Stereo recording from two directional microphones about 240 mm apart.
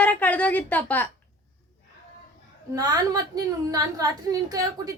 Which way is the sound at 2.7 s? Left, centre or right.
Centre.